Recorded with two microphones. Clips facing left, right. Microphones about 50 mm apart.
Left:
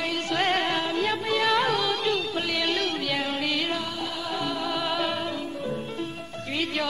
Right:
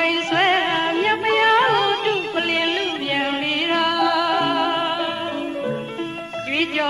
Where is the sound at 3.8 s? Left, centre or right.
Right.